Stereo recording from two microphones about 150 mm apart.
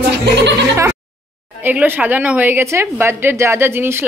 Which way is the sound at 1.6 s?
10° right (ahead or behind).